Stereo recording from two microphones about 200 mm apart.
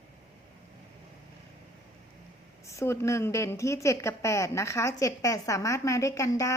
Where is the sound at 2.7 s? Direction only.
15° left (ahead or behind).